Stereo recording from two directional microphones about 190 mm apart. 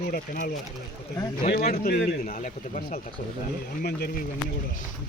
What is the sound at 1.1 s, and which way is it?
Speech, 20° left (ahead or behind).